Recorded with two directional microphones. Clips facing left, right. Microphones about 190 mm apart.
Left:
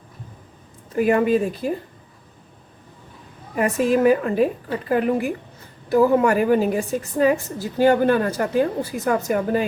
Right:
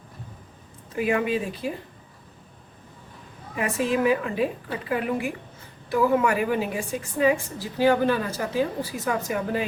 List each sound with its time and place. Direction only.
0.9 s a woman's voice: 45° left (ahead or behind)
3.5 s a woman's voice: 45° left (ahead or behind)